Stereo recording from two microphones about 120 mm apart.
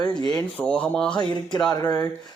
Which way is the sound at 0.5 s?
10° left (ahead or behind).